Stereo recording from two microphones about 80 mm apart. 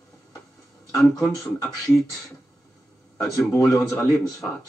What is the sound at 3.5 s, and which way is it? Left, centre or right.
Speech, left.